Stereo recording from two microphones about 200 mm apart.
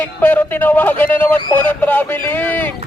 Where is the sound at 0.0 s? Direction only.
10° left (ahead or behind).